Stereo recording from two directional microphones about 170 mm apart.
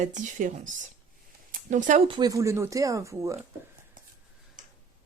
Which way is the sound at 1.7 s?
50° right (ahead or behind).